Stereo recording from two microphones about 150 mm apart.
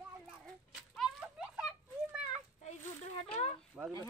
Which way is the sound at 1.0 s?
5° right (ahead or behind).